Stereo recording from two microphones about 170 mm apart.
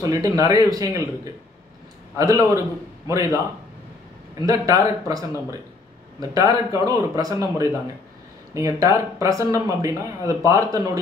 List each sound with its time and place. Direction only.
0.0 s a man's voice: 20° right (ahead or behind)
4.5 s speech: 20° right (ahead or behind)